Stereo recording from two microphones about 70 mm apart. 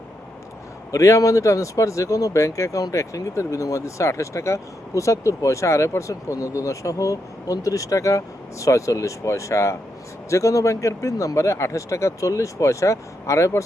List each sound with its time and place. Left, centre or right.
0.9 s speech: left